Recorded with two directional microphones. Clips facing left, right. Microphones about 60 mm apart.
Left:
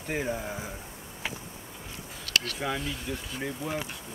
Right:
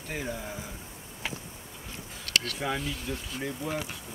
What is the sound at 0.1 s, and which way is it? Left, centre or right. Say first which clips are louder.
Speech: left 4 dB; centre.